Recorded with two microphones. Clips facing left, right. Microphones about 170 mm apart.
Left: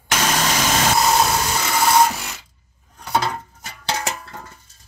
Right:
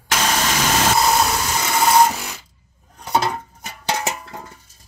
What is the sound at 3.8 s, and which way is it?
Music, 15° right (ahead or behind).